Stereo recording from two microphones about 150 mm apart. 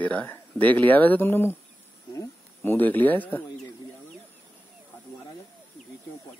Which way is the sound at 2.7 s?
10° left (ahead or behind).